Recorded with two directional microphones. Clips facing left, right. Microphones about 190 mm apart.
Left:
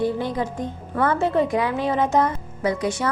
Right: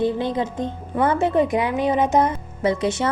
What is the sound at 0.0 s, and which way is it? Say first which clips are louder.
Speech: right 2 dB; 25° right (ahead or behind).